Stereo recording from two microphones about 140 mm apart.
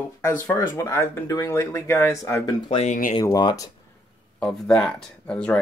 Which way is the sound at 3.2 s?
25° left (ahead or behind).